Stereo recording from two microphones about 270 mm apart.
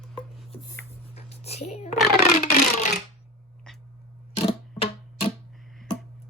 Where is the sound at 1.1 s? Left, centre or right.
Left.